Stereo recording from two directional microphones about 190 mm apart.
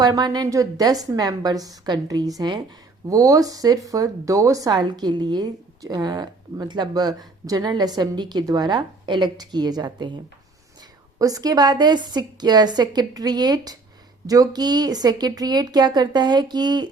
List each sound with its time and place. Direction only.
0.0 s a woman's voice: 20° right (ahead or behind)
11.2 s a woman's voice: 20° right (ahead or behind)